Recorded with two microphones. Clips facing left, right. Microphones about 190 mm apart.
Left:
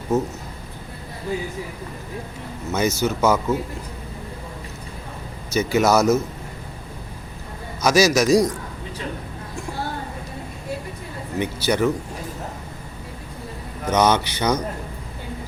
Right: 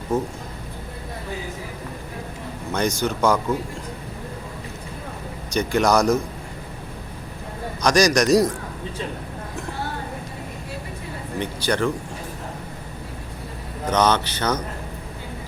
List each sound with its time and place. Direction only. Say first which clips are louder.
0.1 s speech: left 2 dB; 5° left (ahead or behind)
2.7 s a man's voice: left 2 dB; 5° left (ahead or behind)
5.5 s a man's voice: left 1 dB; 5° left (ahead or behind)
7.8 s a man's voice: left 1 dB; 5° left (ahead or behind)
11.3 s speech: left 2 dB; 10° left (ahead or behind)
13.9 s speech: left 1 dB; 10° left (ahead or behind)